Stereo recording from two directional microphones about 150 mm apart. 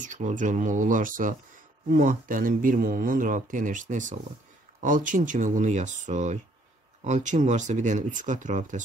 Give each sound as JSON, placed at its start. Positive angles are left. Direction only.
{"t": 0.0, "sound": "speech", "side_deg": -55}